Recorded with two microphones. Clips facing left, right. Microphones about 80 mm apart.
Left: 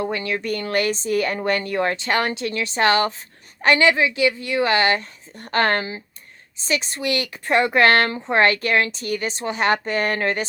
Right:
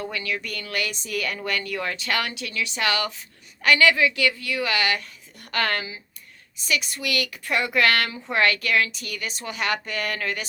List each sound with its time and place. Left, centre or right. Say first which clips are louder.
0.0 s speech: left 6 dB; left